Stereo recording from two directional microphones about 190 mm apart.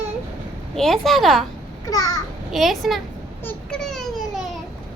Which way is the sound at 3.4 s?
5° left (ahead or behind).